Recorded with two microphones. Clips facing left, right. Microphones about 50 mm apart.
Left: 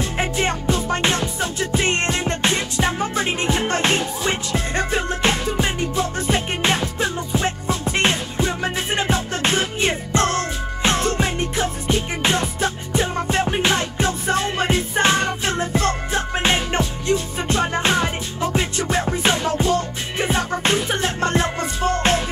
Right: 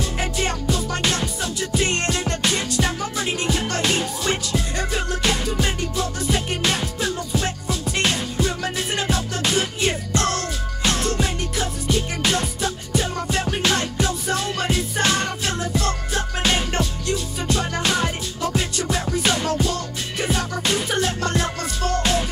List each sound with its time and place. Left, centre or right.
0.0 s music: left